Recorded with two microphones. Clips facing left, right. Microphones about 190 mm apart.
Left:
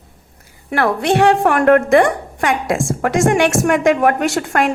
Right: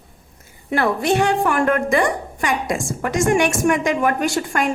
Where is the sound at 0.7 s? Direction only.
65° left (ahead or behind).